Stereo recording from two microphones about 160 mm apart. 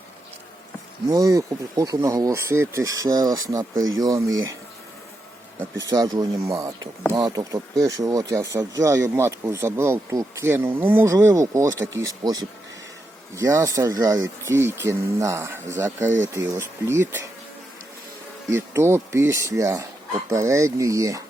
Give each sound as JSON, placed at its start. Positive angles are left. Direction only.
{"t": 1.1, "sound": "speech", "side_deg": -20}
{"t": 5.8, "sound": "speech", "side_deg": -25}
{"t": 18.5, "sound": "speech", "side_deg": -15}